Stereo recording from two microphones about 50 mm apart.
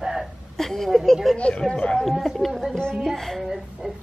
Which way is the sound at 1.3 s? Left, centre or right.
Left.